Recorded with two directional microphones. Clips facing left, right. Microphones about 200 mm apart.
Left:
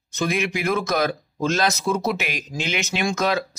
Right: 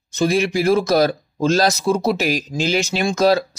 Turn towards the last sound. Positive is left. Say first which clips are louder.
# right 6 dB
turn(degrees=-35)  # may be behind; listen again after turning